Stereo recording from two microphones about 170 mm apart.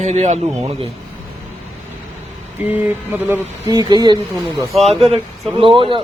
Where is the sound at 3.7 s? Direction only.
25° right (ahead or behind).